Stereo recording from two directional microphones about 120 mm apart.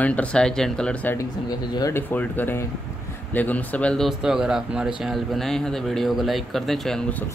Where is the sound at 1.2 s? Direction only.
30° left (ahead or behind).